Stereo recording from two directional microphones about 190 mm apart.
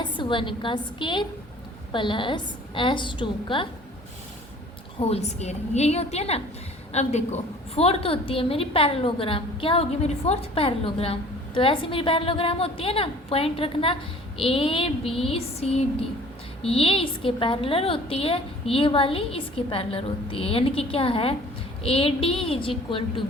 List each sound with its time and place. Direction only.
0.0 s a woman's voice: 25° left (ahead or behind)
4.9 s a woman's voice: 30° left (ahead or behind)